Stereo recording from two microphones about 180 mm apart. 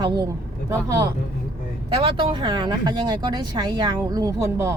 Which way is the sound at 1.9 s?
30° right (ahead or behind).